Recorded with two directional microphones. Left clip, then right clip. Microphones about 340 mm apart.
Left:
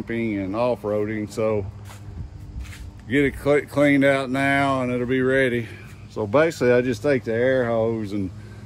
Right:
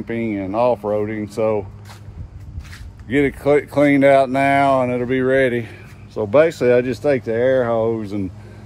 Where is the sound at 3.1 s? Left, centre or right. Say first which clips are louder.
Right 4 dB; centre.